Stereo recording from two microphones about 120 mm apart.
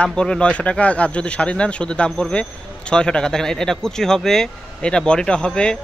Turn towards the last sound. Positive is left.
turn(degrees=10)  # may be behind; listen again after turning